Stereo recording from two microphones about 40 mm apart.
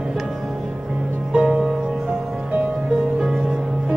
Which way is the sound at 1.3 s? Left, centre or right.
Right.